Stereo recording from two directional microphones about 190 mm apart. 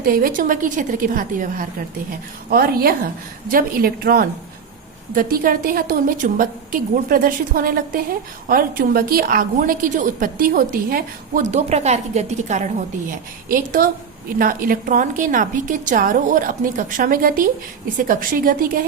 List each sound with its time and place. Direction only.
0.0 s a woman's voice: 50° right (ahead or behind)